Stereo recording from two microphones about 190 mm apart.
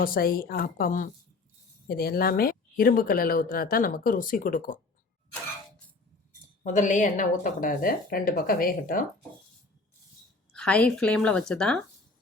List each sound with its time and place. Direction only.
0.0 s speech: 50° left (ahead or behind)
6.6 s speech: 40° left (ahead or behind)
10.5 s a woman's voice: 5° left (ahead or behind)